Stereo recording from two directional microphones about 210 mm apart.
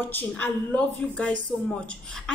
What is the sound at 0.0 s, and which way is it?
A woman's voice, 10° left (ahead or behind).